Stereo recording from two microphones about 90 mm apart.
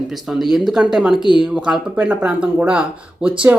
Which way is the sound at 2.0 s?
15° right (ahead or behind).